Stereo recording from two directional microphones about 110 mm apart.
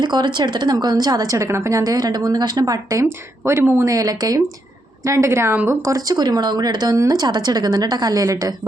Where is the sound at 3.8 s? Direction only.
35° right (ahead or behind).